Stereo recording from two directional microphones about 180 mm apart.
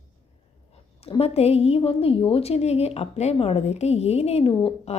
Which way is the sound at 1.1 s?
35° left (ahead or behind).